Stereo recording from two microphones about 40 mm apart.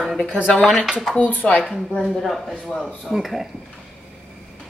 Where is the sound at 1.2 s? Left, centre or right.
Left.